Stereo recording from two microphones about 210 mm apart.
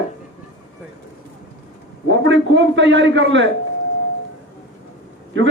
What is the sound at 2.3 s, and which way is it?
Speech, 60° right (ahead or behind).